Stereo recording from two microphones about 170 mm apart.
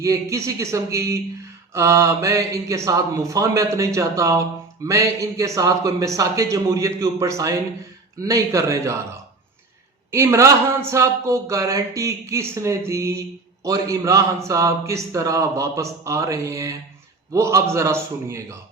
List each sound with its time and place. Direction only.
0.0 s a man's voice: 20° right (ahead or behind)
10.1 s a man's voice: 15° right (ahead or behind)